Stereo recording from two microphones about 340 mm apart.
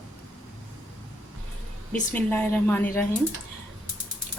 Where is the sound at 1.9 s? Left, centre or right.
Centre.